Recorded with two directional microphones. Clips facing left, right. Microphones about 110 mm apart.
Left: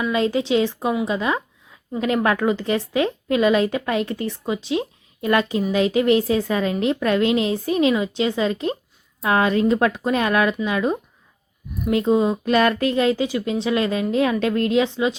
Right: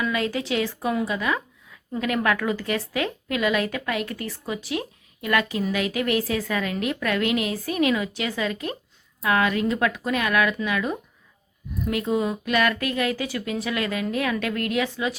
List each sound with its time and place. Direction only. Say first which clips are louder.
0.0 s a woman's voice: left 5 dB; 25° left (ahead or behind)